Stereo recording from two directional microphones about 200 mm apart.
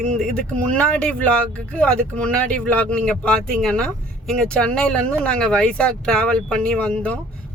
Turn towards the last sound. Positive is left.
turn(degrees=5)  # may be behind; listen again after turning